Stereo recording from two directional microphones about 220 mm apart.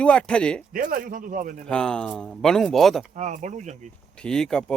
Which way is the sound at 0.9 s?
40° right (ahead or behind).